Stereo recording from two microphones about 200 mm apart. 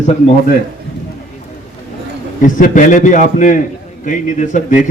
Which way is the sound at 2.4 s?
40° left (ahead or behind).